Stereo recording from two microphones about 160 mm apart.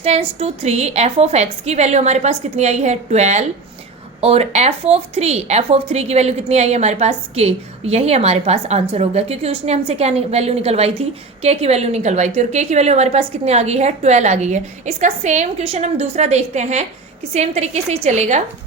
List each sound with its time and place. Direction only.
0.0 s a woman's voice: 40° right (ahead or behind)